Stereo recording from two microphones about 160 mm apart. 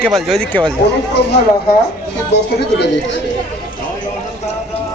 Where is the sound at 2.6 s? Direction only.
90° left.